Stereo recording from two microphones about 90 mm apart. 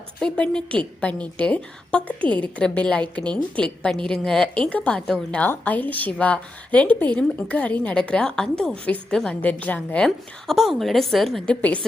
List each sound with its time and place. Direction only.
0.2 s a woman's voice: 10° left (ahead or behind)
10.4 s a woman's voice: centre (ahead or behind)